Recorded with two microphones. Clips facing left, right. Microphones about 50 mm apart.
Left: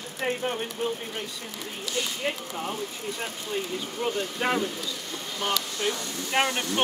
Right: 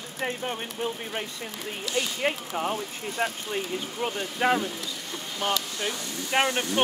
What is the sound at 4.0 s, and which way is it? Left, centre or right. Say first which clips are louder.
Speech: even; centre.